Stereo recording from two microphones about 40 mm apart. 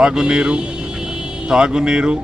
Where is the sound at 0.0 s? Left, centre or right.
Centre.